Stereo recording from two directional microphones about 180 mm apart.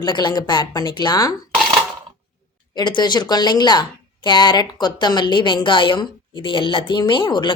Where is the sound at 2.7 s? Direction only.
25° left (ahead or behind).